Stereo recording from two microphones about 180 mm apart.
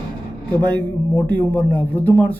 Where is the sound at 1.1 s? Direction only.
10° left (ahead or behind).